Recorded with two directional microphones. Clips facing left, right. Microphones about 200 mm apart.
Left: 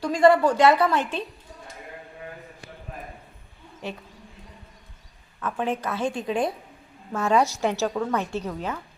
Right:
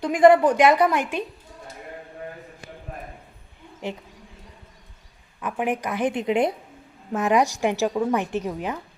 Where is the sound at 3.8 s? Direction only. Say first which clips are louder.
Right 3 dB; 15° right (ahead or behind).